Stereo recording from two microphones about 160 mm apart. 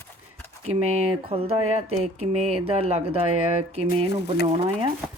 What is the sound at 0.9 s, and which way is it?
Speech, 40° right (ahead or behind).